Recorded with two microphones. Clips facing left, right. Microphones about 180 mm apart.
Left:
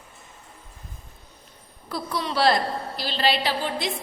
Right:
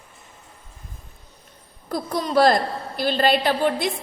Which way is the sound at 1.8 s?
45° right (ahead or behind).